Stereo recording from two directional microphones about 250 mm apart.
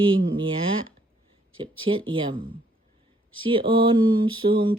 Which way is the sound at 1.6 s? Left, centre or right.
Right.